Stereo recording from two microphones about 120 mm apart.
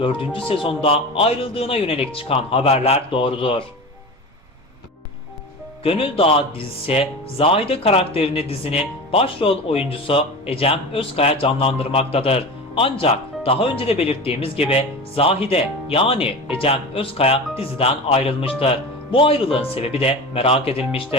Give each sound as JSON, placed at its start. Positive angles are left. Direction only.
{"t": 0.0, "sound": "speech", "side_deg": 45}
{"t": 5.8, "sound": "speech", "side_deg": 50}